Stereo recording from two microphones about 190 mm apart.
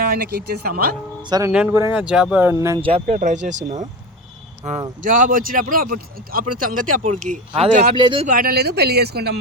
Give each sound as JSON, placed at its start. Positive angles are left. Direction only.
{"t": 0.0, "sound": "speech", "side_deg": -50}
{"t": 1.2, "sound": "speech", "side_deg": -20}
{"t": 2.8, "sound": "speech", "side_deg": -35}
{"t": 5.0, "sound": "speech", "side_deg": -45}
{"t": 7.9, "sound": "speech", "side_deg": -25}
{"t": 8.3, "sound": "speech", "side_deg": -50}